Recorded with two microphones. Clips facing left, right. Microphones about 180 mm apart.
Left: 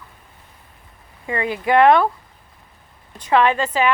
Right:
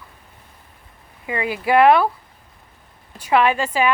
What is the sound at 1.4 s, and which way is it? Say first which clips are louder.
Speech: even; 25° left (ahead or behind).